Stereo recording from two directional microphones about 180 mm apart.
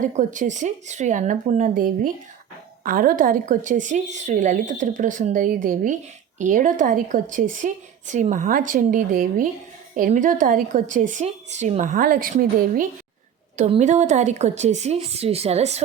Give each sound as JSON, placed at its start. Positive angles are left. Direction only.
{"t": 0.0, "sound": "a woman's voice", "side_deg": -45}